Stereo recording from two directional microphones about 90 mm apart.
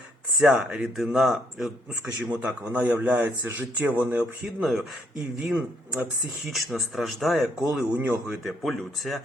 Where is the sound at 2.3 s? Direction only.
20° right (ahead or behind).